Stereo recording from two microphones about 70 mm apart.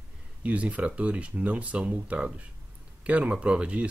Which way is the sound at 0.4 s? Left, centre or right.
Centre.